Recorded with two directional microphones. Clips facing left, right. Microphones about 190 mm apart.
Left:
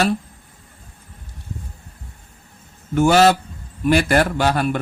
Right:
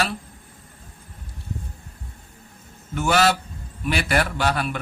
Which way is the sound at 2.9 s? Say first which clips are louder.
Left 6 dB; 40° left (ahead or behind).